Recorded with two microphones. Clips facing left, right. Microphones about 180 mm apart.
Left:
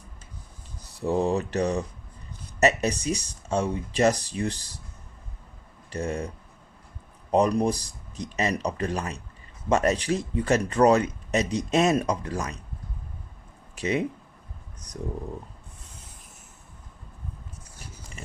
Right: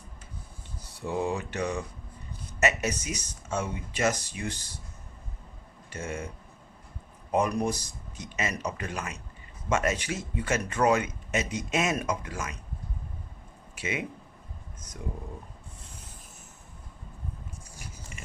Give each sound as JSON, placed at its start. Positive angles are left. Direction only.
{"t": 0.9, "sound": "speech", "side_deg": 35}
{"t": 5.9, "sound": "speech", "side_deg": 35}
{"t": 13.7, "sound": "speech", "side_deg": 35}